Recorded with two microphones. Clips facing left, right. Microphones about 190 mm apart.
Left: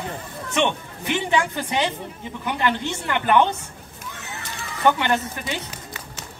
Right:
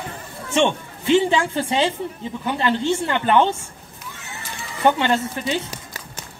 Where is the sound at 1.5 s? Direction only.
25° right (ahead or behind).